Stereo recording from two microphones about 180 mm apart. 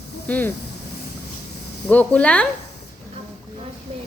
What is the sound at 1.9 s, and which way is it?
Speech, 10° left (ahead or behind).